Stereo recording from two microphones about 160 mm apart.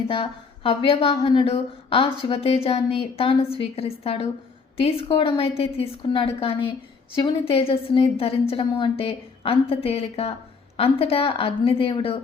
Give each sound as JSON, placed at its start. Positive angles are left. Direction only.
{"t": 0.1, "sound": "a woman's voice", "side_deg": 35}